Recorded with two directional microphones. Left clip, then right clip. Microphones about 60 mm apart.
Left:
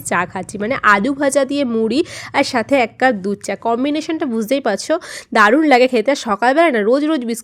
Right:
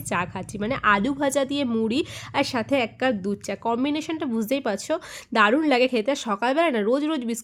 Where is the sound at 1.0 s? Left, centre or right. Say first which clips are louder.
Left 8 dB; left.